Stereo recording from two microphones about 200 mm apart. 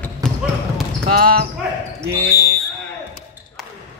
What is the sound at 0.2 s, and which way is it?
Trickle, 5° left (ahead or behind).